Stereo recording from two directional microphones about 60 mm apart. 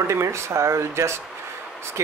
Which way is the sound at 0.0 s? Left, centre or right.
Right.